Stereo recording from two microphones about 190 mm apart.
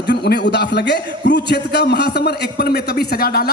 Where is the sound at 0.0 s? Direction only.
60° left (ahead or behind).